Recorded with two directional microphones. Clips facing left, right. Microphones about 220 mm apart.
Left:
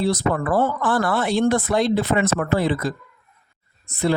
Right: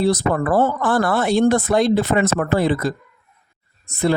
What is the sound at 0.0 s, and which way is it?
Speech, 45° right (ahead or behind).